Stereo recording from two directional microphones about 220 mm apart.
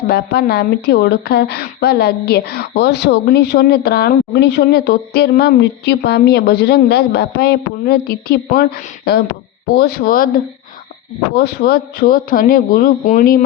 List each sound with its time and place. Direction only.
0.1 s a woman's voice: 45° left (ahead or behind)